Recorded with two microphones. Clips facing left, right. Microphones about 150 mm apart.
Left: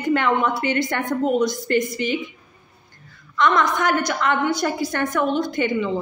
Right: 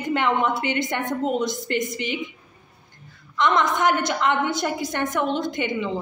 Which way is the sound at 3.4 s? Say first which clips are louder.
Left 1 dB; 20° right (ahead or behind).